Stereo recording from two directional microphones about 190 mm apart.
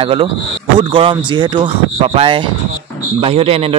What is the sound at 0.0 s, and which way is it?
Speech, 30° right (ahead or behind).